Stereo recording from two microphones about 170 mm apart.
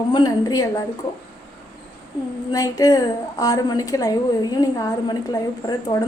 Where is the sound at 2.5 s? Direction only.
20° left (ahead or behind).